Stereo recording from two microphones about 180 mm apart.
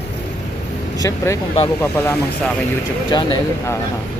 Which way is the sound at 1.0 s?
15° left (ahead or behind).